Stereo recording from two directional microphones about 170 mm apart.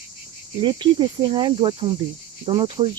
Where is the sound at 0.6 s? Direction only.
30° right (ahead or behind).